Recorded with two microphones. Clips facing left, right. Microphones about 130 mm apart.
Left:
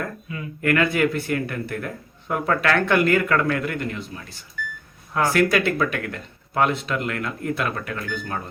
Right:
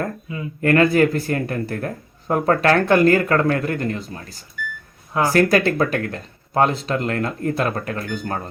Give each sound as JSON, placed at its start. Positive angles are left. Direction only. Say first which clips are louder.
{"t": 0.3, "sound": "speech", "louder": "right 4 dB", "side_deg": -30}